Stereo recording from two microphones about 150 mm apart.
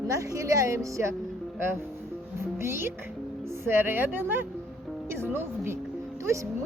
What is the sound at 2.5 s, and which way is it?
Speech, 15° right (ahead or behind).